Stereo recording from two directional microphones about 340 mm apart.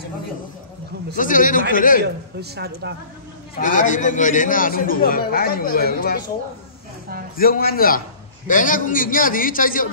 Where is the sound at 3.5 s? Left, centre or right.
Left.